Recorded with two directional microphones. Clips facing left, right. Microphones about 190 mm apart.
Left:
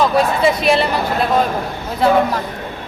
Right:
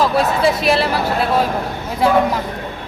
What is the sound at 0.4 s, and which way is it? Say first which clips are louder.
Speech: left 1 dB; centre (ahead or behind).